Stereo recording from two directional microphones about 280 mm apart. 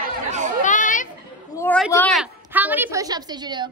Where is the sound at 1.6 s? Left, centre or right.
Centre.